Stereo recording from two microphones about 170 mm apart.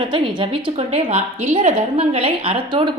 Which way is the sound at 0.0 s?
30° right (ahead or behind).